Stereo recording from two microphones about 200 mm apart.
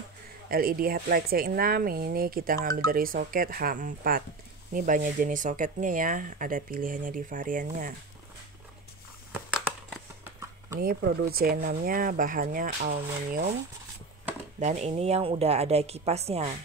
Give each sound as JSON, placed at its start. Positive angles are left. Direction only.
{"t": 0.5, "sound": "speech", "side_deg": -45}
{"t": 10.8, "sound": "speech", "side_deg": -50}
{"t": 14.6, "sound": "speech", "side_deg": -35}